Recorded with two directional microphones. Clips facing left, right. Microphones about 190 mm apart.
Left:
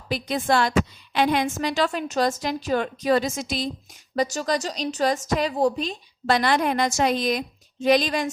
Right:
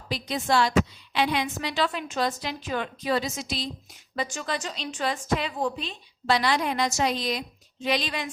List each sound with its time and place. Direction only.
0.1 s a woman's voice: 55° left (ahead or behind)